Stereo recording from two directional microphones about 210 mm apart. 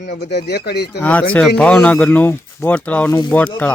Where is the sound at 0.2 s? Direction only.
55° left (ahead or behind).